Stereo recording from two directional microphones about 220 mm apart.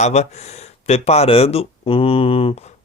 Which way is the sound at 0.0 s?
30° left (ahead or behind).